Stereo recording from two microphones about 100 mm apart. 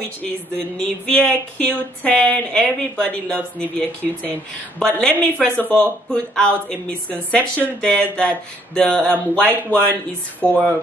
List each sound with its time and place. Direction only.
0.7 s speech: 10° left (ahead or behind)